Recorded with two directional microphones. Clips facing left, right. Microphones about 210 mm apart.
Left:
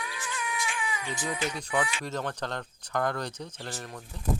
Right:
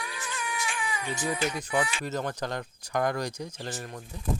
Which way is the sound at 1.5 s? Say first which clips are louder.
Right 1 dB; 10° right (ahead or behind).